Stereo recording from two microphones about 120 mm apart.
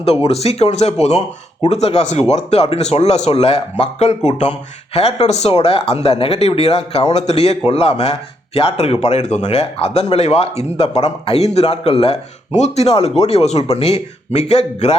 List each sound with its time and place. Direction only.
0.3 s speech: 60° left (ahead or behind)